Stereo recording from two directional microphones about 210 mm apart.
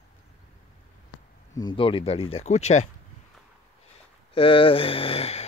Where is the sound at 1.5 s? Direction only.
20° left (ahead or behind).